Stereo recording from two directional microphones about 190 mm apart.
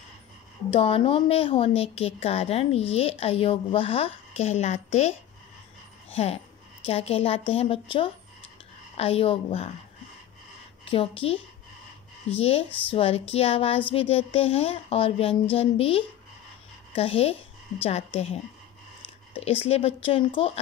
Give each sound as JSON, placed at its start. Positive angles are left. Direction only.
{"t": 0.7, "sound": "a woman's voice", "side_deg": 30}
{"t": 6.1, "sound": "a woman's voice", "side_deg": 30}
{"t": 10.9, "sound": "speech", "side_deg": 30}
{"t": 12.4, "sound": "a woman's voice", "side_deg": 30}